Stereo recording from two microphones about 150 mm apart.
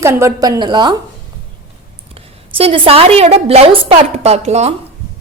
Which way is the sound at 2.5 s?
40° right (ahead or behind).